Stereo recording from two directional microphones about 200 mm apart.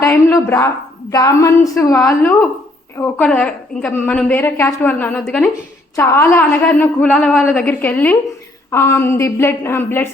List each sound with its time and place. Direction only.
0.0 s a sound: 15° left (ahead or behind)
1.1 s a woman's voice: 15° left (ahead or behind)
3.0 s a woman's voice: 5° left (ahead or behind)